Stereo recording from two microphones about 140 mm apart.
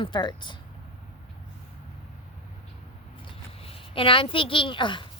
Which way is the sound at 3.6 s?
40° left (ahead or behind).